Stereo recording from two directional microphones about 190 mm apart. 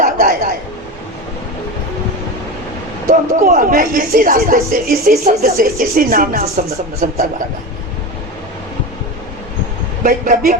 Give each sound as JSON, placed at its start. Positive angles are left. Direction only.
{"t": 0.0, "sound": "a sound", "side_deg": -50}
{"t": 3.1, "sound": "speech", "side_deg": -50}
{"t": 10.0, "sound": "speech", "side_deg": -50}